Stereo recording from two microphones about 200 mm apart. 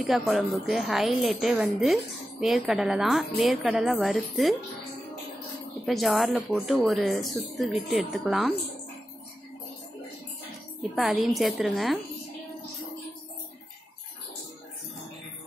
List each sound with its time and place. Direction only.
0.0 s a woman's voice: centre (ahead or behind)
5.9 s a woman's voice: centre (ahead or behind)
11.0 s a woman's voice: centre (ahead or behind)